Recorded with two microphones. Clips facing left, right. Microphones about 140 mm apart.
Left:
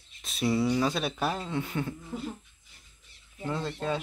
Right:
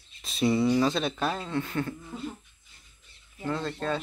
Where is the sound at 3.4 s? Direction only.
15° left (ahead or behind).